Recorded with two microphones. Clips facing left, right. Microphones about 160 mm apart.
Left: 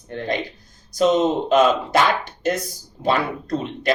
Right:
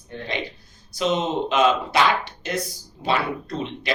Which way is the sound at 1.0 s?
45° left (ahead or behind).